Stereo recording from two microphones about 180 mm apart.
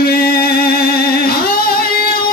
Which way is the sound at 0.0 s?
60° left (ahead or behind).